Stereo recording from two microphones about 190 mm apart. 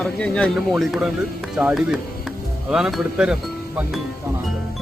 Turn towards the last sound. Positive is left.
turn(degrees=-5)  # may be behind; listen again after turning